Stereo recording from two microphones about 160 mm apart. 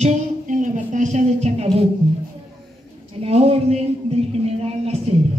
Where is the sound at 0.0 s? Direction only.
50° right (ahead or behind).